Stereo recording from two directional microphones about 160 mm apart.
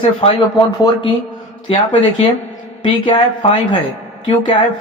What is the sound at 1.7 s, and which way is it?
Speech, 35° left (ahead or behind).